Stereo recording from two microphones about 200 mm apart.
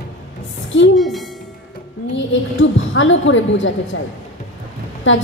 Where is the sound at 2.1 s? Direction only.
70° left (ahead or behind).